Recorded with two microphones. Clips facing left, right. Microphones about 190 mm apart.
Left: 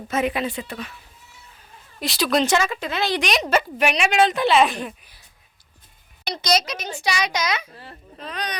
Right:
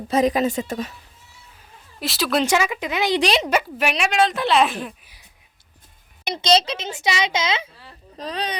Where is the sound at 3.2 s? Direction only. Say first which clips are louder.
Right 3 dB; 30° right (ahead or behind).